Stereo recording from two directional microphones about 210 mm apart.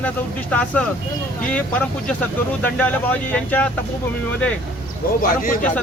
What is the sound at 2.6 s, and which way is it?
Speech, 5° left (ahead or behind).